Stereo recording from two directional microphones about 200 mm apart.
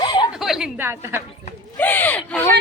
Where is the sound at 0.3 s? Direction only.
Centre (ahead or behind).